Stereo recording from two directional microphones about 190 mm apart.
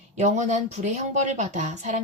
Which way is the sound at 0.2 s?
40° right (ahead or behind).